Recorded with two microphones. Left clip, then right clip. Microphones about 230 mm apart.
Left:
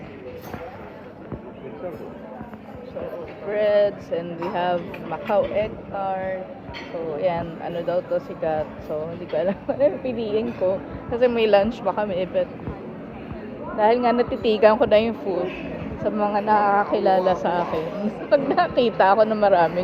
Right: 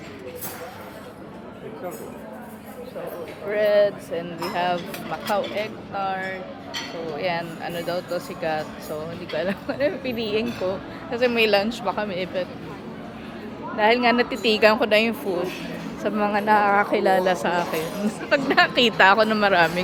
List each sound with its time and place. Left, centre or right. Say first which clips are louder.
3.5 s a woman's voice: even; centre
13.7 s a woman's voice: even; centre
16.6 s speech: even; right
16.9 s speech: left 1 dB; right